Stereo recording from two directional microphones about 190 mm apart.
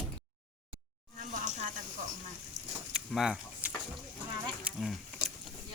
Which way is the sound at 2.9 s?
5° right (ahead or behind).